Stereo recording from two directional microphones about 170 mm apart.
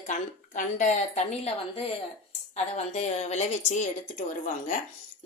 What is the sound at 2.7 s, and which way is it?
Speech, 40° left (ahead or behind).